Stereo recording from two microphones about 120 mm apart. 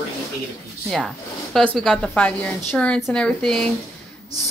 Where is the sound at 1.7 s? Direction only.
Centre (ahead or behind).